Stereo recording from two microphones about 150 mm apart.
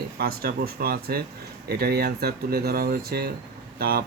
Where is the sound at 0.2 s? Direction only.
90° right.